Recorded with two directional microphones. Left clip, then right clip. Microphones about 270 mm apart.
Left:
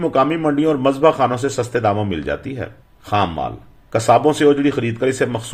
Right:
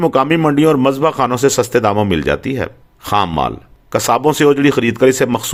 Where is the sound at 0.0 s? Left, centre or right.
Right.